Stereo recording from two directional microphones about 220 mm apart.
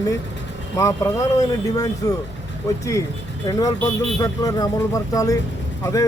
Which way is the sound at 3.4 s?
15° left (ahead or behind).